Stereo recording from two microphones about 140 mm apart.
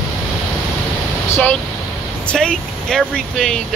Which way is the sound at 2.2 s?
5° left (ahead or behind).